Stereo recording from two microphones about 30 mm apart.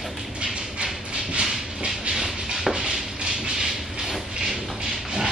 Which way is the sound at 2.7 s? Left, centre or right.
Right.